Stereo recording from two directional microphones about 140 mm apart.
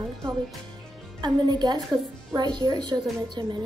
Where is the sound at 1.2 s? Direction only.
30° right (ahead or behind).